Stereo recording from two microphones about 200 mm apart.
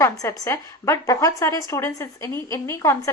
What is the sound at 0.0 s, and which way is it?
A woman's voice, 15° left (ahead or behind).